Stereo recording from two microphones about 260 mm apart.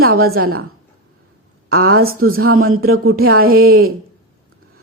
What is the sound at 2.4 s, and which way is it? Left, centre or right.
Speech, right.